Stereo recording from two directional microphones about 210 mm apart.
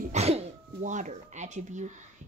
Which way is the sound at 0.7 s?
35° right (ahead or behind).